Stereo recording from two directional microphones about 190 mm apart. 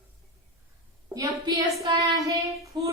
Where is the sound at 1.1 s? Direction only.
20° right (ahead or behind).